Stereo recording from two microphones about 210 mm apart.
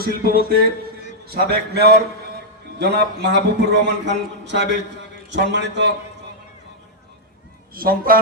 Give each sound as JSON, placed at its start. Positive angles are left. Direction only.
{"t": 0.0, "sound": "a man's voice", "side_deg": -45}
{"t": 7.7, "sound": "a man's voice", "side_deg": -45}